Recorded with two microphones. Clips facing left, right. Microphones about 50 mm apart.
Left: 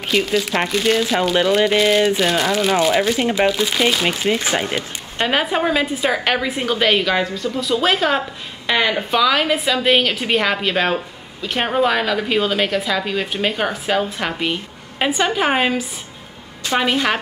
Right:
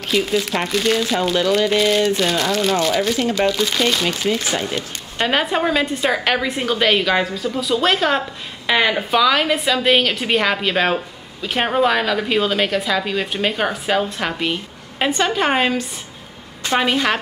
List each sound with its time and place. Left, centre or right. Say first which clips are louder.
0.1 s a woman's voice: left 1 dB; centre
1.3 s speech: left 1 dB; centre
4.7 s a woman's voice: left 1 dB; centre